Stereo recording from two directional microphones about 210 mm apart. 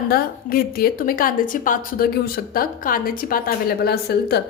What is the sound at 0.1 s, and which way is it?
A woman's voice, 45° left (ahead or behind).